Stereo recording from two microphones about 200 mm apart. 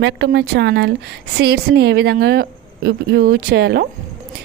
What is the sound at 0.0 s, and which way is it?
A woman's voice, 60° right (ahead or behind).